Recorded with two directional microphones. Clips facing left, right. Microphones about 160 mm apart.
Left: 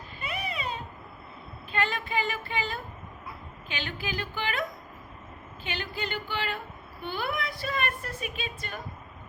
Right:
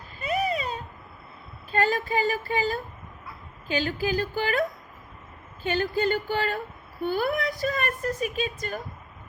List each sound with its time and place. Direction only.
0.2 s a sound: 40° right (ahead or behind)
1.7 s speech: 40° right (ahead or behind)
5.6 s speech: 45° right (ahead or behind)